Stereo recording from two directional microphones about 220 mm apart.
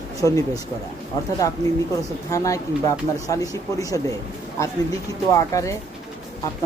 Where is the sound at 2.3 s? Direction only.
15° left (ahead or behind).